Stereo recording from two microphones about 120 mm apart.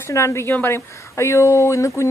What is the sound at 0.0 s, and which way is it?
Speech, 25° left (ahead or behind).